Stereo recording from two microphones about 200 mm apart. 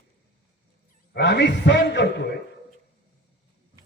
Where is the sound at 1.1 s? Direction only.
55° left (ahead or behind).